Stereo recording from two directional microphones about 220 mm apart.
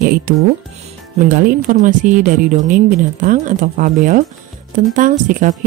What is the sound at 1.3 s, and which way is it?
Speech, 40° right (ahead or behind).